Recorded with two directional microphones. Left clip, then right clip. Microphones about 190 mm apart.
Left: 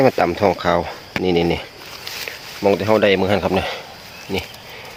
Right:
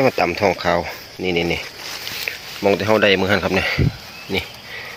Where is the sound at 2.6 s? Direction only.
5° left (ahead or behind).